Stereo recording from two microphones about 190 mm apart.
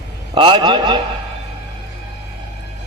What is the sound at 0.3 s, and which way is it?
Speech, 25° right (ahead or behind).